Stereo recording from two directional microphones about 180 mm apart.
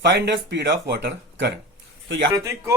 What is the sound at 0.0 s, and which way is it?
Speech, 70° right (ahead or behind).